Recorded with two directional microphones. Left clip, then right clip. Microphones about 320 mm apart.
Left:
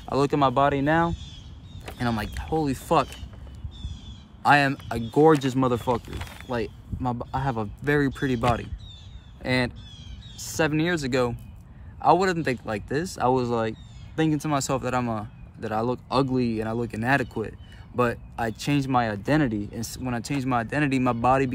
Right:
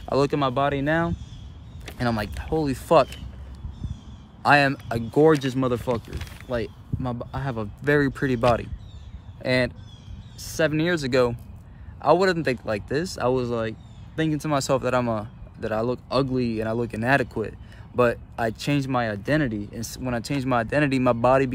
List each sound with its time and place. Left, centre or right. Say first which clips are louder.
0.0 s speech: even; centre
4.4 s speech: right 1 dB; centre
5.9 s speech: left 1 dB; centre
6.5 s speech: right 1 dB; centre